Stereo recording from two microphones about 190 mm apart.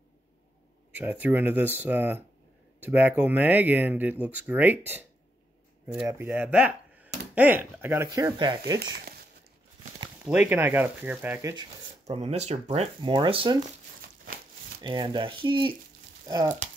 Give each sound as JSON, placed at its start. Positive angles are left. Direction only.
{"t": 0.9, "sound": "speech", "side_deg": -10}
{"t": 6.0, "sound": "speech", "side_deg": -10}
{"t": 8.7, "sound": "speech", "side_deg": -55}
{"t": 10.2, "sound": "speech", "side_deg": -5}
{"t": 12.1, "sound": "speech", "side_deg": -35}
{"t": 14.8, "sound": "speech", "side_deg": -25}